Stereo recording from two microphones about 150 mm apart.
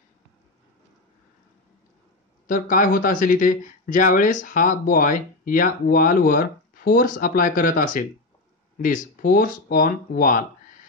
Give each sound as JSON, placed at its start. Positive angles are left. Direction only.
{"t": 2.4, "sound": "speech", "side_deg": 65}